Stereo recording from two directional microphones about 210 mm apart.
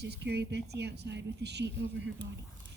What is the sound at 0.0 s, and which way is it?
A woman's voice, 50° right (ahead or behind).